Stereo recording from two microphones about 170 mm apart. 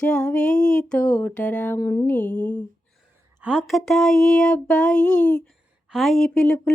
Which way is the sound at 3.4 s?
5° right (ahead or behind).